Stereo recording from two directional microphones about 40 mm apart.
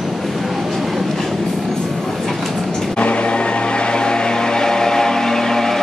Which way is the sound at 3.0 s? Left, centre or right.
Left.